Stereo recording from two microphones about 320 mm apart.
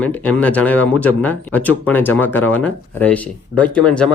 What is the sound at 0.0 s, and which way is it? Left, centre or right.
A man's voice, centre.